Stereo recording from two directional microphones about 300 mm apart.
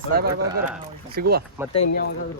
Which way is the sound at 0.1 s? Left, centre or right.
Right.